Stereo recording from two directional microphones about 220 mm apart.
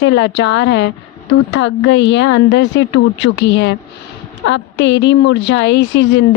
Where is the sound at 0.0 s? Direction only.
55° left (ahead or behind).